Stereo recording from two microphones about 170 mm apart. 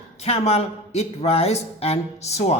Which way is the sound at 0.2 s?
40° left (ahead or behind).